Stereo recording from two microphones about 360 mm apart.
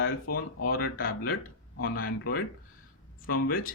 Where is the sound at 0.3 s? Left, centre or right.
Left.